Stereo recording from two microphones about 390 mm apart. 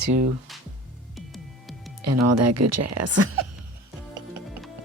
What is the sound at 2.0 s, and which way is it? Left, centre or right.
A woman's voice, right.